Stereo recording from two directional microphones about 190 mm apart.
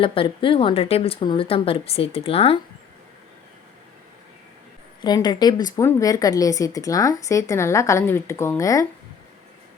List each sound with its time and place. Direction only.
0.0 s speech: 30° left (ahead or behind)
5.0 s a woman's voice: 20° left (ahead or behind)